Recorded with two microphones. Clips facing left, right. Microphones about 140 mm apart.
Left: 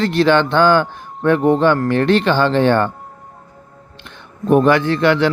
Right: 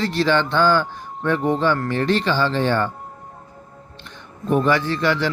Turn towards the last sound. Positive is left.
turn(degrees=60)  # may be behind; listen again after turning